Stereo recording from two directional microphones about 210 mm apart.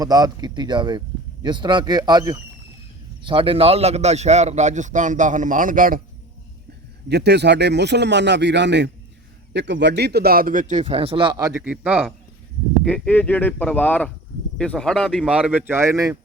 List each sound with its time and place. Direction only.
0.0 s a man's voice: 15° right (ahead or behind); by 6.0 s 40° right (ahead or behind)
7.1 s a man's voice: 55° right (ahead or behind); by 12.1 s 5° right (ahead or behind)
12.8 s speech: 5° left (ahead or behind); by 16.1 s 15° right (ahead or behind)